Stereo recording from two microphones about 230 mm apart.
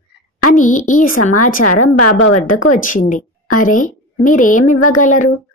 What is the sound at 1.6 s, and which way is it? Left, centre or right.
Speech, left.